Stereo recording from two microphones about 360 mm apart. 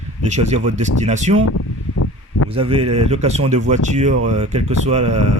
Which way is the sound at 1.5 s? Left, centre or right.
Left.